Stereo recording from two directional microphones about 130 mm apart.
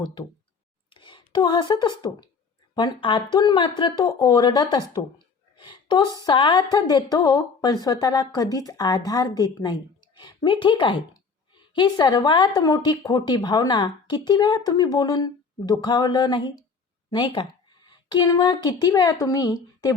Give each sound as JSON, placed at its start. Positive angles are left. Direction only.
{"t": 0.0, "sound": "a woman's voice", "side_deg": 35}
{"t": 5.5, "sound": "a sound", "side_deg": 35}
{"t": 6.2, "sound": "a woman's voice", "side_deg": 40}